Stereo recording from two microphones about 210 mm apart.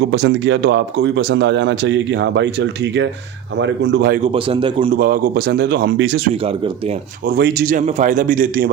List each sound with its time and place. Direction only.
0.1 s a man's voice: 55° right (ahead or behind)
4.2 s a man's voice: 25° right (ahead or behind)
4.9 s a man's voice: 40° right (ahead or behind)
7.3 s speech: 45° right (ahead or behind)